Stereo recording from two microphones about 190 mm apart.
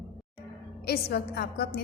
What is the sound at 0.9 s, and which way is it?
Speech, 55° left (ahead or behind).